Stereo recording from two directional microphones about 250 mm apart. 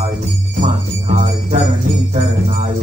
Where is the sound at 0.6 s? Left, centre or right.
Right.